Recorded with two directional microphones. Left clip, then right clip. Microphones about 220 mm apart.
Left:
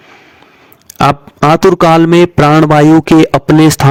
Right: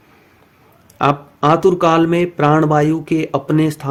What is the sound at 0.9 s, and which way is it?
A man's voice, 50° left (ahead or behind).